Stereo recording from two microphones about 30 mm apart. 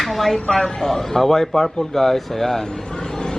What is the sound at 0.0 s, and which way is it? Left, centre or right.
Speech, centre.